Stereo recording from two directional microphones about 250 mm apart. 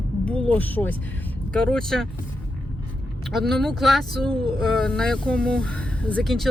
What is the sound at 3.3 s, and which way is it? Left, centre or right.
Speech, centre.